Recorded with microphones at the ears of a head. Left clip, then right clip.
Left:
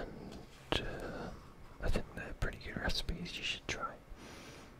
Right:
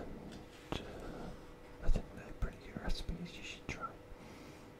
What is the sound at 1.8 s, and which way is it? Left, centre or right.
Whispering, left.